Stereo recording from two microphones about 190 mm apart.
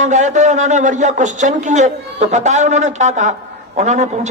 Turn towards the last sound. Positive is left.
turn(degrees=-40)  # may be behind; listen again after turning